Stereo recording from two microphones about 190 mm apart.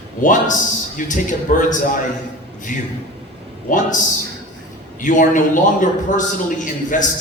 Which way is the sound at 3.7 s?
40° left (ahead or behind).